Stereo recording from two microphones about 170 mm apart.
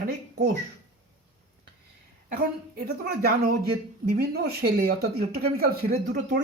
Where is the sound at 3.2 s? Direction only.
70° right (ahead or behind).